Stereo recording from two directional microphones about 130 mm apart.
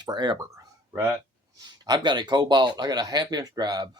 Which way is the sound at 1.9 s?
35° right (ahead or behind).